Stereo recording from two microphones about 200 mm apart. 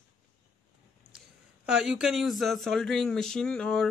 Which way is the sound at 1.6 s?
5° right (ahead or behind).